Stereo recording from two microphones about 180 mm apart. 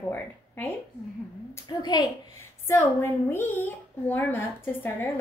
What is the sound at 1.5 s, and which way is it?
A woman's voice, 25° left (ahead or behind).